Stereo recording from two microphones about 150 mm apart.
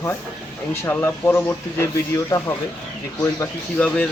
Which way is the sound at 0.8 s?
15° left (ahead or behind).